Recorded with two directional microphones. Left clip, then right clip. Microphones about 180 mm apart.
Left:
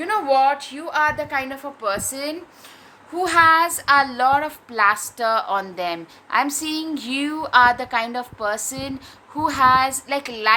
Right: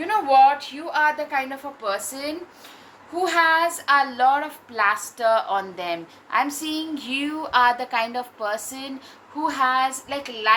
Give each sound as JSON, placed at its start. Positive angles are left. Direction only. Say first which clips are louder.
{"t": 0.0, "sound": "a woman's voice", "louder": "right 2 dB", "side_deg": 45}